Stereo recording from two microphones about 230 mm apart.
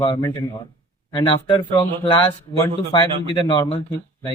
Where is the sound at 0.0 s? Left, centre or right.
Centre.